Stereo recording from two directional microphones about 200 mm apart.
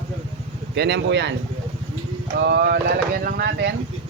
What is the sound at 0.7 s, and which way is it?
Speech, 60° right (ahead or behind).